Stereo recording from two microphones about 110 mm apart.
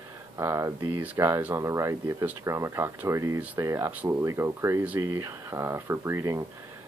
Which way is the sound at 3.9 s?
15° right (ahead or behind).